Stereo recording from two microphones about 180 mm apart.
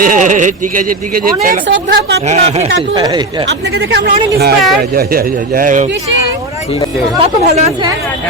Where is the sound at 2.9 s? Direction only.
25° right (ahead or behind).